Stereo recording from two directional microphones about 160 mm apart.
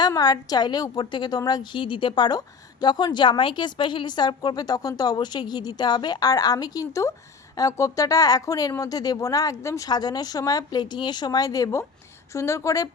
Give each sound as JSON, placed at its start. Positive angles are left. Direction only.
{"t": 0.0, "sound": "speech", "side_deg": 25}